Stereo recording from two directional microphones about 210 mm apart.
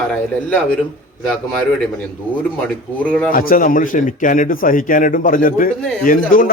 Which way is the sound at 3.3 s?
40° left (ahead or behind).